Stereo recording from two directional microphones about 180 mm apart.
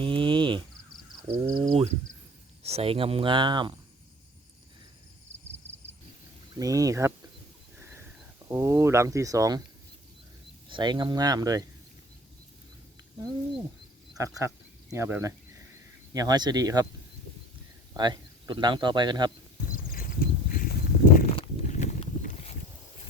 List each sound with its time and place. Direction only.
0.0 s cricket: 30° right (ahead or behind)
1.5 s speech: 30° right (ahead or behind)
6.6 s speech: 20° right (ahead or behind)
7.8 s a sound: 15° right (ahead or behind)
8.4 s speech: 15° right (ahead or behind)
10.7 s speech: 25° right (ahead or behind)
14.2 s speech: 20° right (ahead or behind)
17.9 s speech: 25° right (ahead or behind)
20.5 s a sound: 50° left (ahead or behind)
21.3 s horse: 35° left (ahead or behind)